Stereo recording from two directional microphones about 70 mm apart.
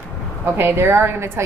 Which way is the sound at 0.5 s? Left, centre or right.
Right.